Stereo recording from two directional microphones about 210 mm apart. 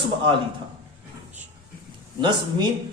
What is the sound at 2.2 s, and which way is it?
Speech, 20° right (ahead or behind).